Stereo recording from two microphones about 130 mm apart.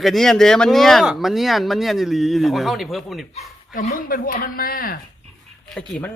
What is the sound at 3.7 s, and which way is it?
Speech, 90° left.